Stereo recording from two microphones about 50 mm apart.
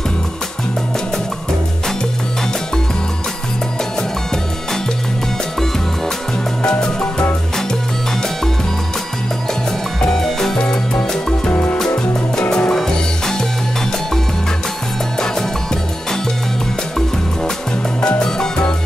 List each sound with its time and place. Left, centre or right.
6.6 s music: centre
9.9 s music: centre
11.5 s music: left
12.4 s music: centre
15.1 s music: centre
18.0 s salsa music: centre